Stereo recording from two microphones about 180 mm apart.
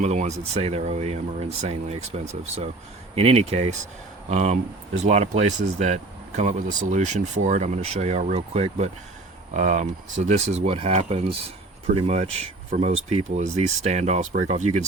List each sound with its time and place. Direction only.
0.0 s speech: 40° right (ahead or behind)